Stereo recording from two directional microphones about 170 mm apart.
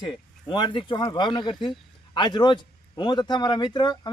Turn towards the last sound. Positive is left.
turn(degrees=25)  # may be behind; listen again after turning